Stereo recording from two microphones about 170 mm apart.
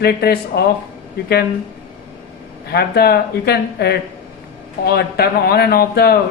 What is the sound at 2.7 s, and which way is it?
Speech, 65° left (ahead or behind).